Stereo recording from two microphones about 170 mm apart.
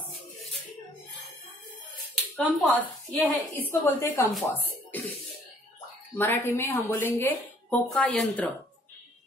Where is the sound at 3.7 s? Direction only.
15° left (ahead or behind).